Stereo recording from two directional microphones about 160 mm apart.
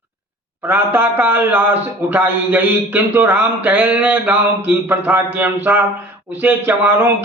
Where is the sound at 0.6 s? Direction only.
10° right (ahead or behind).